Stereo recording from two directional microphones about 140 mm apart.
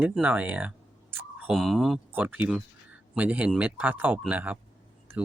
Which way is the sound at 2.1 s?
10° right (ahead or behind).